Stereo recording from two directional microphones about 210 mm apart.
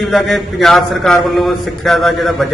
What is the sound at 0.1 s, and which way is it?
A man's voice, centre (ahead or behind).